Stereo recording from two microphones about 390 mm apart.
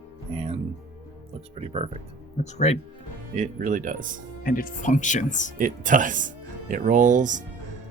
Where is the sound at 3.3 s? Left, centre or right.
Centre.